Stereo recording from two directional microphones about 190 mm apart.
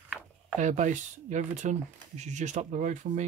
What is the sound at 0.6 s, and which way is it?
Speech, 40° right (ahead or behind).